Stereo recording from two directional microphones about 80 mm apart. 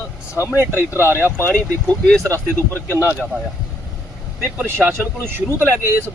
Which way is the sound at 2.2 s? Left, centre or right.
Right.